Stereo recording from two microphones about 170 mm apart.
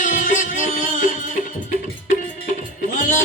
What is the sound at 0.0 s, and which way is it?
Music, 50° left (ahead or behind).